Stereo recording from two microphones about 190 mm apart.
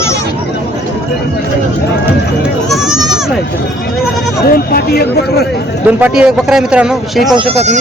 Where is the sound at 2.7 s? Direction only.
Centre (ahead or behind).